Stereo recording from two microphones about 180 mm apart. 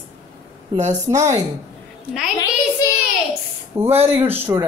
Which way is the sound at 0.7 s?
40° right (ahead or behind).